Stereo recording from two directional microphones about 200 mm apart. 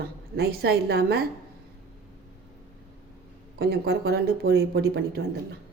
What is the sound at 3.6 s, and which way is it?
A woman's voice, 55° right (ahead or behind).